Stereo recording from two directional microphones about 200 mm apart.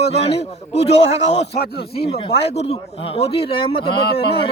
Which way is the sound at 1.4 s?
55° left (ahead or behind).